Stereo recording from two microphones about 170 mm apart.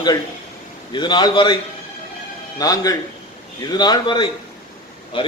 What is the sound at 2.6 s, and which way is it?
A man's voice, 20° left (ahead or behind).